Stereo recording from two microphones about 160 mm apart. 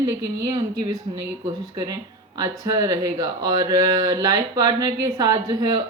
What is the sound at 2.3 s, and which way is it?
Speech, 20° right (ahead or behind).